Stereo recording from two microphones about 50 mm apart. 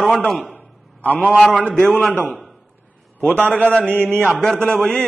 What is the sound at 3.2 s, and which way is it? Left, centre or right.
Speech, left.